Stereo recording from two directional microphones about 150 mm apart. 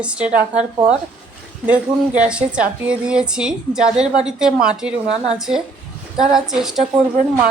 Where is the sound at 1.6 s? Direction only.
10° right (ahead or behind).